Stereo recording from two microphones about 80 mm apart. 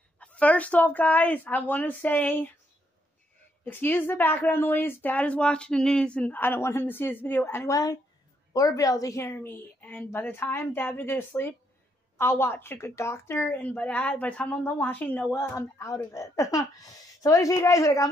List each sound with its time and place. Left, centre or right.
0.2 s a woman's voice: centre
3.6 s a woman's voice: left
7.6 s speech: left
9.2 s a woman's voice: left
15.3 s speech: left